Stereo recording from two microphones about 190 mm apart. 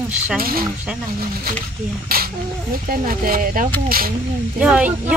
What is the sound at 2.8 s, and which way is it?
Speech, 50° right (ahead or behind).